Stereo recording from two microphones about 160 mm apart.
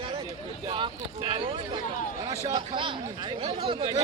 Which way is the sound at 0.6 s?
30° right (ahead or behind).